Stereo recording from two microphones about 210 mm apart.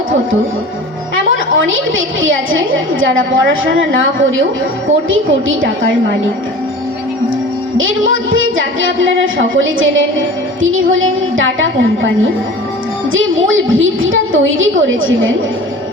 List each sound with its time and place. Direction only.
1.5 s a woman's voice: 70° right (ahead or behind)
7.8 s a woman's voice: 70° right (ahead or behind)